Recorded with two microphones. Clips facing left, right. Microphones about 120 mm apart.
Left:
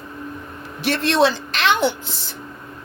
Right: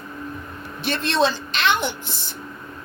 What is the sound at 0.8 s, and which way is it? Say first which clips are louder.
Speech: left 3 dB; 85° left.